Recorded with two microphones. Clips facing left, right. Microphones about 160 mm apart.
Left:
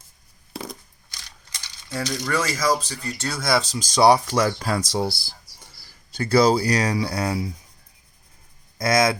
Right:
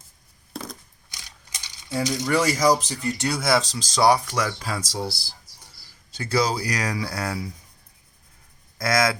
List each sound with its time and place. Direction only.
0.5 s a sound: 10° left (ahead or behind)
1.1 s coin: 15° right (ahead or behind)
3.4 s speech: centre (ahead or behind)
3.8 s speech: 20° left (ahead or behind)
4.6 s speech: 60° left (ahead or behind)
6.1 s a sound: 60° left (ahead or behind)
6.3 s speech: 30° left (ahead or behind)
8.8 s speech: 20° left (ahead or behind)